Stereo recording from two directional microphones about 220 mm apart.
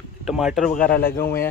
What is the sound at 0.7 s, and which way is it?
Speech, 40° left (ahead or behind).